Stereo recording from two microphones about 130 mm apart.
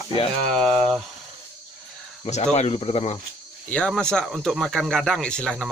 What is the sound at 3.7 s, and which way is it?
Speech, 5° left (ahead or behind).